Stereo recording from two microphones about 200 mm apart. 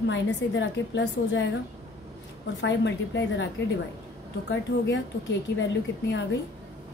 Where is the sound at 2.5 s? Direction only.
65° left (ahead or behind).